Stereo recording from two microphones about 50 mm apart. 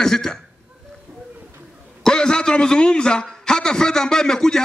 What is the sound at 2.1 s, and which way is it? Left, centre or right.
A man's voice, centre.